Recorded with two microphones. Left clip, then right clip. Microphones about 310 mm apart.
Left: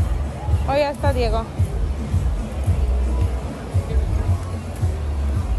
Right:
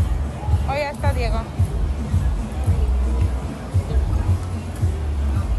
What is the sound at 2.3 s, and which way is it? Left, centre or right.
Music, left.